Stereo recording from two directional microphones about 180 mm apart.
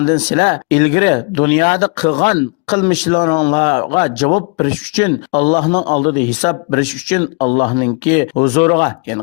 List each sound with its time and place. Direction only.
0.0 s speech: 40° left (ahead or behind)